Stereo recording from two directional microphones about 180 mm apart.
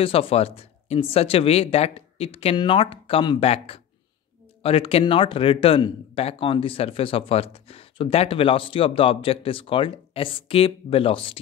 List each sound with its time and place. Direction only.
0.0 s speech: 30° left (ahead or behind)